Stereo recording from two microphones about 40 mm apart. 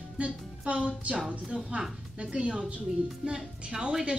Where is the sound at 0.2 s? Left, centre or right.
Right.